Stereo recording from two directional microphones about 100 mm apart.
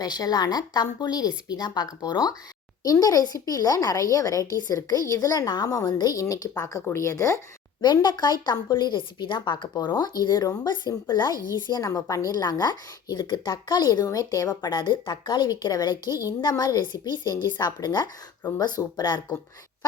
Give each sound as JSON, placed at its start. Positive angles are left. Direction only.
{"t": 0.0, "sound": "a woman's voice", "side_deg": 40}
{"t": 7.8, "sound": "a woman's voice", "side_deg": 45}